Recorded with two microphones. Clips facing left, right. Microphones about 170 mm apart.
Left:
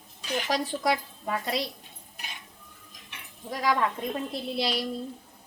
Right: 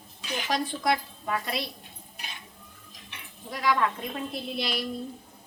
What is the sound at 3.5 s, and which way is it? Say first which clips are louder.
Speech: even; 40° left (ahead or behind).